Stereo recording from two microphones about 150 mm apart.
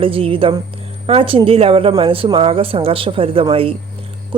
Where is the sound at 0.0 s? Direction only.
35° right (ahead or behind).